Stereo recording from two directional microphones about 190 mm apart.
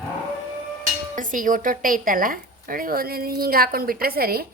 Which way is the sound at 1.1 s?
45° right (ahead or behind).